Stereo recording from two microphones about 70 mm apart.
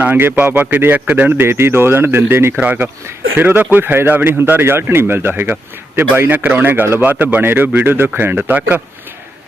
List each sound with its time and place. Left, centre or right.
0.0 s speech: right
1.4 s a man's voice: right
2.6 s a man's voice: right